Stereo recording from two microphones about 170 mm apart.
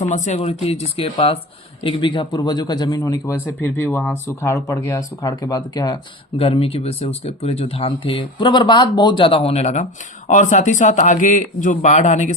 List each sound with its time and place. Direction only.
0.0 s speech: 45° left (ahead or behind); by 6.0 s 25° left (ahead or behind)
6.3 s speech: 35° left (ahead or behind)